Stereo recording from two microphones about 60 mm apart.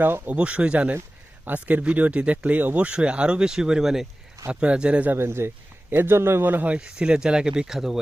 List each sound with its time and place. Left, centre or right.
0.0 s a man's voice: right
0.3 s speech: right
4.6 s speech: centre
5.1 s a man's voice: right
6.7 s speech: centre